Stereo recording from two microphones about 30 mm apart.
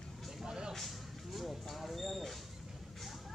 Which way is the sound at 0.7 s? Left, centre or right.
Centre.